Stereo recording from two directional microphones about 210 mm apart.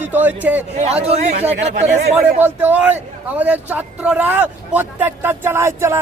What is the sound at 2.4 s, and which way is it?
A man's voice, 5° right (ahead or behind).